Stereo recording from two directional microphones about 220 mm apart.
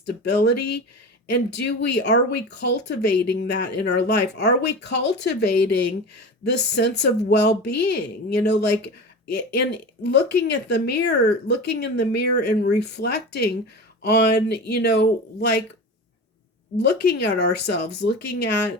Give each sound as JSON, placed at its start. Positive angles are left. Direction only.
{"t": 0.3, "sound": "speech", "side_deg": 50}
{"t": 17.1, "sound": "speech", "side_deg": 50}